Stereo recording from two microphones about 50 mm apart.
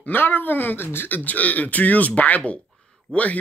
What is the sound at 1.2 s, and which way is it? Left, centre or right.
Speech, left.